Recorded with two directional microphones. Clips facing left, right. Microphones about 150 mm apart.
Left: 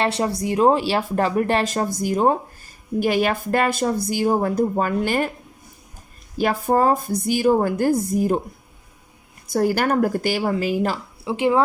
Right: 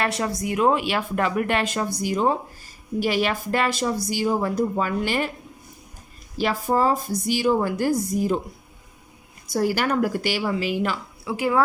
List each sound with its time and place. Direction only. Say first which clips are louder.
0.0 s a woman's voice: left 3 dB; 30° left (ahead or behind); by 5.3 s 45° left (ahead or behind)
6.3 s a woman's voice: left 3 dB; 50° left (ahead or behind)
9.5 s a woman's voice: left 3 dB; 50° left (ahead or behind)
11.3 s speech: left 3 dB; 25° left (ahead or behind)